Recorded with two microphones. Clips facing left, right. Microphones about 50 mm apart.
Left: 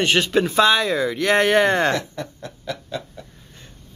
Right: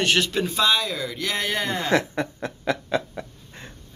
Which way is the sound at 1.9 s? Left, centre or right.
Right.